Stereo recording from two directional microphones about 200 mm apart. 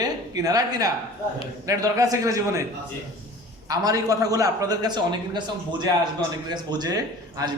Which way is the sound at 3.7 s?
20° right (ahead or behind).